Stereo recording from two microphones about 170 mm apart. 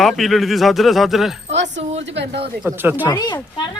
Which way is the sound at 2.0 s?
90° right.